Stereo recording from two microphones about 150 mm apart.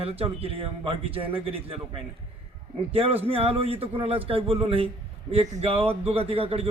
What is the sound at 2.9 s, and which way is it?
A man's voice, 40° right (ahead or behind).